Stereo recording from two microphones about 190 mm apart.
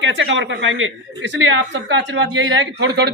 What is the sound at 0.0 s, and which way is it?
A woman's voice, 75° right (ahead or behind).